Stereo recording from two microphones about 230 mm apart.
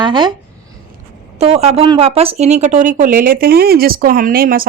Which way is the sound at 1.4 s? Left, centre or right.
Right.